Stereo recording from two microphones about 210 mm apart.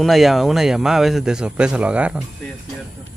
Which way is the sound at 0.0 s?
Centre (ahead or behind).